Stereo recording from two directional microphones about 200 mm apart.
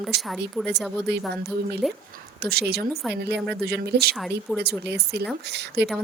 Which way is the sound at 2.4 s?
50° right (ahead or behind).